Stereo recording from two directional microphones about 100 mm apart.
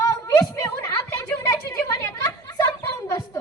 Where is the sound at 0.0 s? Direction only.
30° left (ahead or behind).